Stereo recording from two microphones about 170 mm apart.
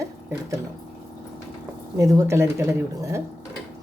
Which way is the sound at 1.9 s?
20° right (ahead or behind).